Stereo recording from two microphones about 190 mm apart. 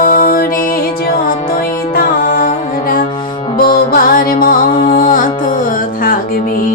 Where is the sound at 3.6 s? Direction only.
50° left (ahead or behind).